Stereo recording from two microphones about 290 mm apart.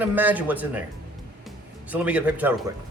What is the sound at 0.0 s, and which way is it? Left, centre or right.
Speech, centre.